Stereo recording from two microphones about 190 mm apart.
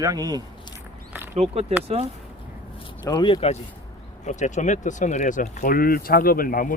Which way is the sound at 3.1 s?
25° left (ahead or behind).